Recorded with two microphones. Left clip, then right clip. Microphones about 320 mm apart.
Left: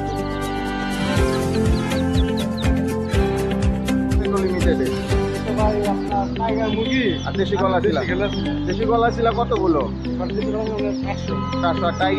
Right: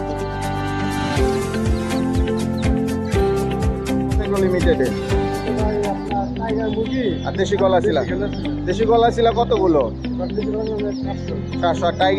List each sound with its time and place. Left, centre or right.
7.3 s speech: centre
11.6 s speech: centre